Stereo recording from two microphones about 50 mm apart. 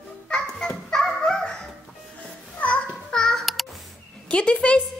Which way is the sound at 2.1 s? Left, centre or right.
Left.